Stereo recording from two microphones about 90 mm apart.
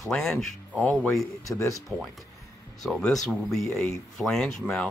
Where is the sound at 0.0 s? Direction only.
5° left (ahead or behind).